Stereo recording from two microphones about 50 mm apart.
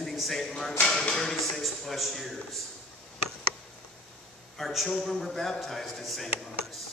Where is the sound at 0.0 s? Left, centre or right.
Centre.